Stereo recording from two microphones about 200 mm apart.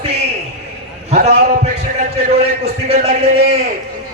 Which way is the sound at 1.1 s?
35° right (ahead or behind).